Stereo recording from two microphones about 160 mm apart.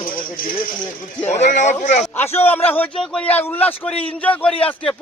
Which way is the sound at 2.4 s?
15° left (ahead or behind).